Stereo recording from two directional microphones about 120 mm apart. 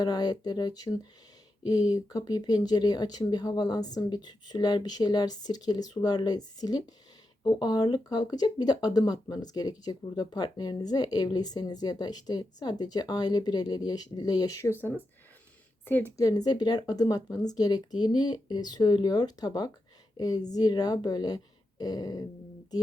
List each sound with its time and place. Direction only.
0.0 s a woman's voice: 35° left (ahead or behind); by 16.1 s 15° left (ahead or behind)
16.1 s speech: 30° left (ahead or behind)